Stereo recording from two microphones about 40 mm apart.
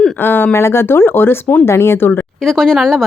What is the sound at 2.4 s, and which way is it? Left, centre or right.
Speech, centre.